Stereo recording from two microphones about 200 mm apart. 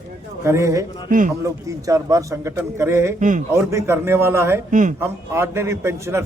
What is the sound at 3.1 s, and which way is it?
Speech, 40° right (ahead or behind).